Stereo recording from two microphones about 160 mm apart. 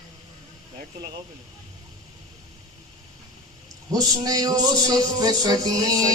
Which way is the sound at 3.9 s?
25° right (ahead or behind).